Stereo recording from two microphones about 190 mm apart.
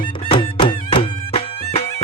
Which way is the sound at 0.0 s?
25° left (ahead or behind).